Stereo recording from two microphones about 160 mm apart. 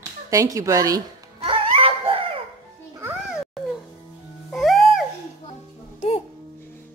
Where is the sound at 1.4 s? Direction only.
35° right (ahead or behind).